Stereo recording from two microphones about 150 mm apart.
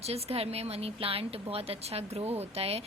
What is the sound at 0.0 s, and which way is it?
Speech, 45° right (ahead or behind).